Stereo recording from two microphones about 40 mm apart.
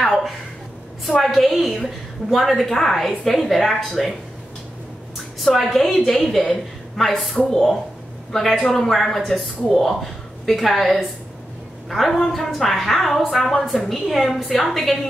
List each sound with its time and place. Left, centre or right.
1.0 s a woman's voice: centre
5.4 s a woman's voice: centre